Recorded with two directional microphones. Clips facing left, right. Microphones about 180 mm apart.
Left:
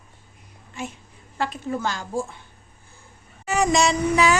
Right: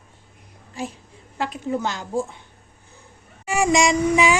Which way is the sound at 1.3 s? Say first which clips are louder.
Even; 5° right (ahead or behind).